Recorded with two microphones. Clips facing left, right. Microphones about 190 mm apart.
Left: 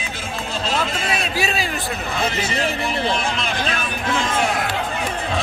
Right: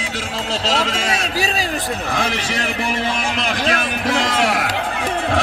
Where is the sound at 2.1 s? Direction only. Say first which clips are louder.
Left 1 dB; 85° right.